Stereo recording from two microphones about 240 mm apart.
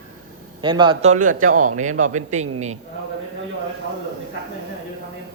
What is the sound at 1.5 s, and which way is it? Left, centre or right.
Speech, right.